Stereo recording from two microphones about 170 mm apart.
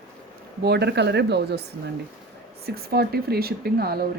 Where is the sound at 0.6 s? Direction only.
75° right (ahead or behind).